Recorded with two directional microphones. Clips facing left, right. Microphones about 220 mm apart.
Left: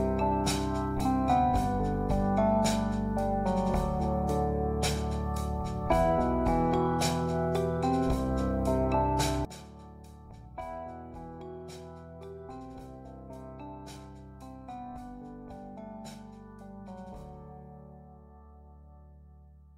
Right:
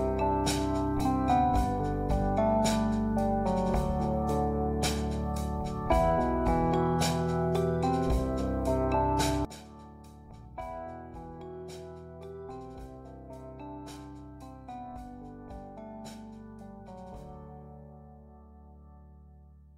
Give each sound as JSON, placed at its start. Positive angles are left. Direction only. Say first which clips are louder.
{"t": 0.0, "sound": "music", "louder": "even", "side_deg": 0}
{"t": 10.6, "sound": "music", "louder": "even", "side_deg": 0}